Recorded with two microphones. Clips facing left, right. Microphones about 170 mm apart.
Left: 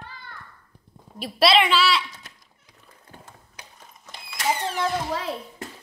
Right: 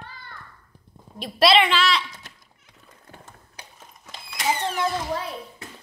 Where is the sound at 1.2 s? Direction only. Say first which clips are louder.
Right 1 dB; centre (ahead or behind).